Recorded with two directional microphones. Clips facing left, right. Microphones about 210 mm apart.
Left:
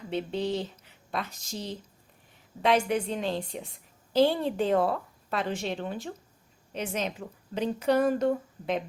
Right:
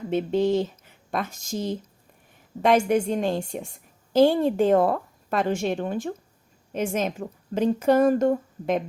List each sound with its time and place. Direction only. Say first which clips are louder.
0.1 s a woman's voice: right 8 dB; 50° right (ahead or behind)